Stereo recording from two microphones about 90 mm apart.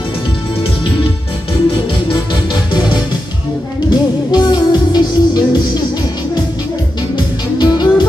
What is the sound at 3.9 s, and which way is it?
Music, 50° left (ahead or behind).